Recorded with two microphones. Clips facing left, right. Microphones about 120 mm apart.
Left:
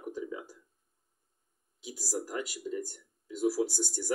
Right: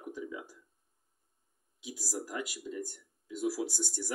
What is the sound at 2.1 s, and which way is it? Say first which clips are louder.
Speech: left 3 dB; 35° left (ahead or behind).